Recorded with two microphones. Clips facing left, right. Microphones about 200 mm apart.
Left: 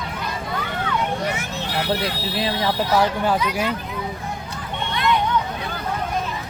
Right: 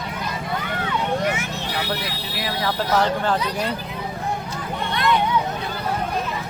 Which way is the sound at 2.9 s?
10° left (ahead or behind).